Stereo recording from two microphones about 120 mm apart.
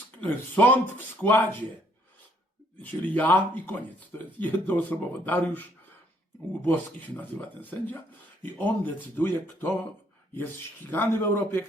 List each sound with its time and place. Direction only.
0.2 s speech: 15° left (ahead or behind)
3.2 s speech: 15° left (ahead or behind)